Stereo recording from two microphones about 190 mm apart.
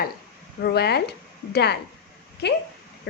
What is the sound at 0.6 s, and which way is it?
A woman's voice, 60° left (ahead or behind).